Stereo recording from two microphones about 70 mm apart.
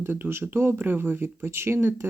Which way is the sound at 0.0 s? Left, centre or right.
Right.